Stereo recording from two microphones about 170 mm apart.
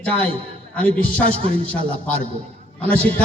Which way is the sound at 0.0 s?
10° left (ahead or behind).